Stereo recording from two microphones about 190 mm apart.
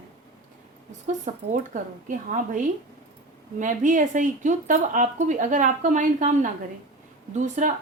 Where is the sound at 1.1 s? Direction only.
40° right (ahead or behind).